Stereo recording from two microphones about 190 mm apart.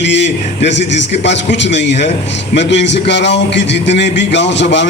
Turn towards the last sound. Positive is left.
turn(degrees=70)  # may be behind; listen again after turning